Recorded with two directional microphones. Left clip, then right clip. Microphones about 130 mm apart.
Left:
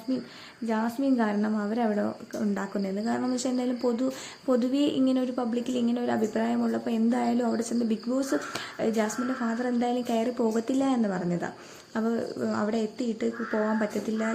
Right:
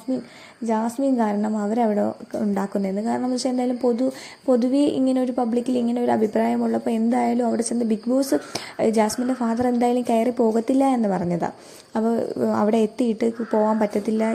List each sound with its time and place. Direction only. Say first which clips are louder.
0.7 s a woman's voice: right 5 dB; 30° right (ahead or behind)